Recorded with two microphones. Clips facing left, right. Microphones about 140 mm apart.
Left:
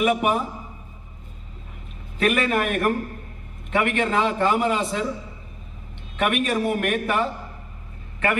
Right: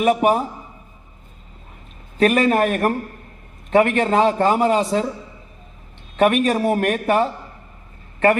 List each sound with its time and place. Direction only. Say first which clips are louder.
0.0 s a man's voice: right 4 dB; 40° right (ahead or behind)
2.1 s a man's voice: right 5 dB; 35° right (ahead or behind)
6.1 s a man's voice: right 6 dB; 35° right (ahead or behind)